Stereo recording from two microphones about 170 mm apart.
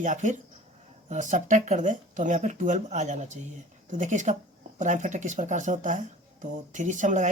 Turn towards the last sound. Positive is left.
turn(degrees=-45)  # may be behind; listen again after turning